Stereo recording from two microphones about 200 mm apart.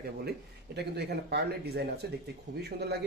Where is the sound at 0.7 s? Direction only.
55° right (ahead or behind).